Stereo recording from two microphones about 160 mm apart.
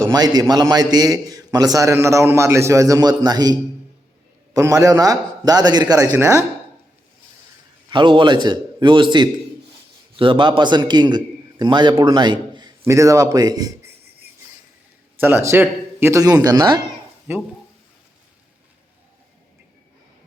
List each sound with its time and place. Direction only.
0.0 s a man's voice: 25° right (ahead or behind)
7.9 s a man's voice: 30° right (ahead or behind)
15.2 s a man's voice: 15° right (ahead or behind)
17.3 s speech: 15° right (ahead or behind)